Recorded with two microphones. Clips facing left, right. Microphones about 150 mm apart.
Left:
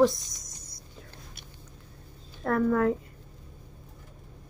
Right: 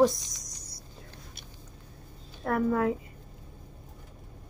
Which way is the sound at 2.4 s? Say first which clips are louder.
Left 2 dB; 20° right (ahead or behind).